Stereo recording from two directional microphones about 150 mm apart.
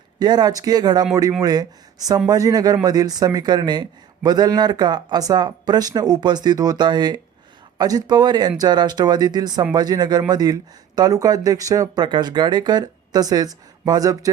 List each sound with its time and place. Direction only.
0.2 s speech: 25° right (ahead or behind)